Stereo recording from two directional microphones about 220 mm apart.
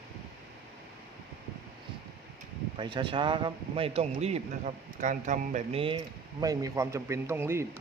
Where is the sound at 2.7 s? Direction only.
20° right (ahead or behind).